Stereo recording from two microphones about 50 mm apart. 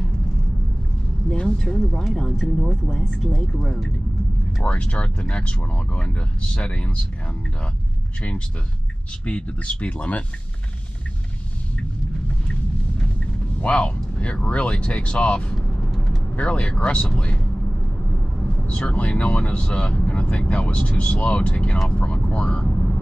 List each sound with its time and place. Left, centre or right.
1.3 s a sound: centre
2.1 s speech: centre
4.6 s speech: left
9.2 s speech: left
13.6 s speech: left
18.7 s speech: left